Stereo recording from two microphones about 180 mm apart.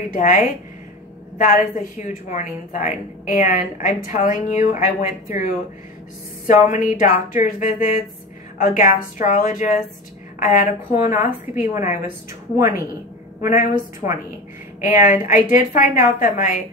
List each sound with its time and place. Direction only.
0.1 s a woman's voice: 45° left (ahead or behind)
6.4 s a woman's voice: 45° left (ahead or behind)
12.5 s a woman's voice: 20° right (ahead or behind)
13.5 s a woman's voice: 50° left (ahead or behind)